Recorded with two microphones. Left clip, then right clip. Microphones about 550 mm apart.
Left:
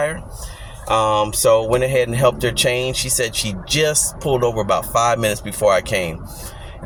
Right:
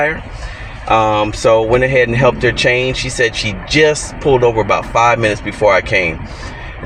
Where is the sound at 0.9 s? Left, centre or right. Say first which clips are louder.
Right 4 dB; left.